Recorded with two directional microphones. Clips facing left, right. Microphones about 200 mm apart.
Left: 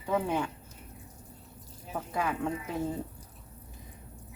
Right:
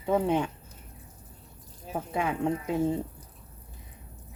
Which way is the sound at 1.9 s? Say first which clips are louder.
Right 3 dB; 25° right (ahead or behind).